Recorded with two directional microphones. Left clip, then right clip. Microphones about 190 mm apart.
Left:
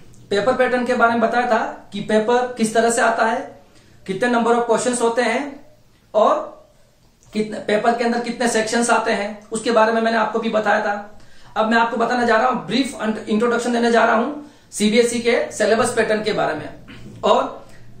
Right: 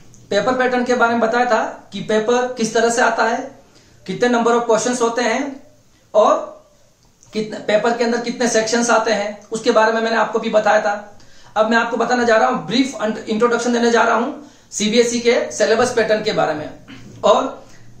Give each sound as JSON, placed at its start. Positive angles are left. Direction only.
{"t": 0.3, "sound": "speech", "side_deg": -15}
{"t": 7.6, "sound": "a woman's voice", "side_deg": -15}